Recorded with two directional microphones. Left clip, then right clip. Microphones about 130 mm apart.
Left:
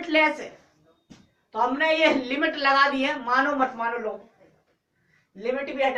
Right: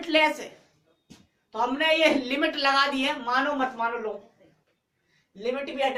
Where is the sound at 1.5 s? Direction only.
45° right (ahead or behind); by 4.1 s 25° right (ahead or behind).